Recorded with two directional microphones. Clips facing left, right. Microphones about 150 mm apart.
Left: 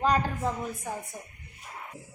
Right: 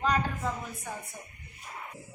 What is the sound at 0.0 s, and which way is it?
Speech, 35° left (ahead or behind).